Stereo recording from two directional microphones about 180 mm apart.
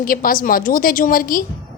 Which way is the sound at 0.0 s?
50° left (ahead or behind).